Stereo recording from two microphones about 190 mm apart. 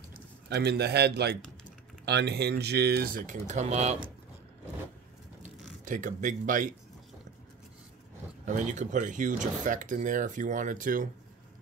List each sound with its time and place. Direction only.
0.5 s speech: 60° right (ahead or behind); by 3.9 s 35° right (ahead or behind)
5.9 s speech: 40° right (ahead or behind)
8.5 s speech: 40° right (ahead or behind)